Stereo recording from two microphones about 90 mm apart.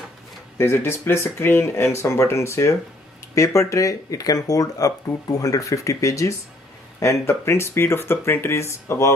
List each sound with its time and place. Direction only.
0.6 s speech: 30° left (ahead or behind)